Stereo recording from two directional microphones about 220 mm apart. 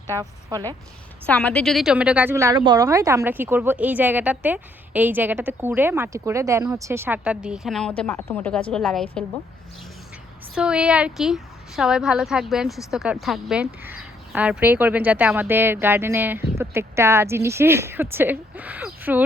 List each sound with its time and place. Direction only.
0.1 s a woman's voice: 15° right (ahead or behind)
1.3 s a woman's voice: 5° left (ahead or behind)
10.5 s a woman's voice: 5° right (ahead or behind)